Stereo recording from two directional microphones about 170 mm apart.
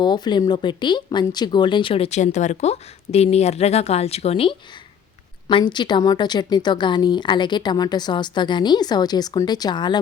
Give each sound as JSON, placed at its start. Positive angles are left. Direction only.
{"t": 0.0, "sound": "a woman's voice", "side_deg": 25}